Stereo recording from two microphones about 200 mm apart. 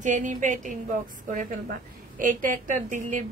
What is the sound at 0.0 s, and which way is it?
A woman's voice, 40° right (ahead or behind).